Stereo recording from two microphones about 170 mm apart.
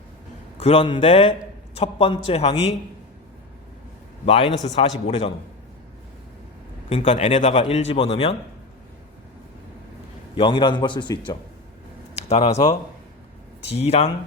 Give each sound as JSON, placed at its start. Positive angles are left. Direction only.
{"t": 0.6, "sound": "a man's voice", "side_deg": 35}
{"t": 4.3, "sound": "a man's voice", "side_deg": 35}
{"t": 6.9, "sound": "a man's voice", "side_deg": 40}
{"t": 10.3, "sound": "a man's voice", "side_deg": 30}
{"t": 12.1, "sound": "speech", "side_deg": 40}
{"t": 13.7, "sound": "a man's voice", "side_deg": 40}